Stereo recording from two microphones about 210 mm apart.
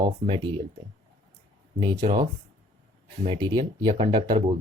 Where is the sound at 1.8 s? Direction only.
20° right (ahead or behind).